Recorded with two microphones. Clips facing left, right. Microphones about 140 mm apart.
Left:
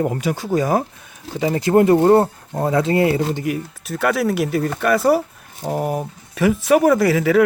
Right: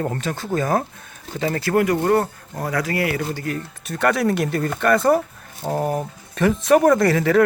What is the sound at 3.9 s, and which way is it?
Speech, 5° left (ahead or behind).